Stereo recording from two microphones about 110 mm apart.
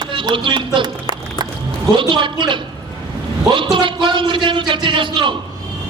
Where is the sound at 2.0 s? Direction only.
50° right (ahead or behind).